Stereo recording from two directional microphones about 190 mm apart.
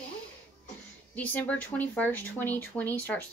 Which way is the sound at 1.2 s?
10° left (ahead or behind).